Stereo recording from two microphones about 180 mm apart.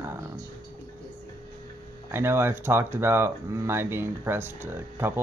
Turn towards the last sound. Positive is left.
turn(degrees=-10)  # may be behind; listen again after turning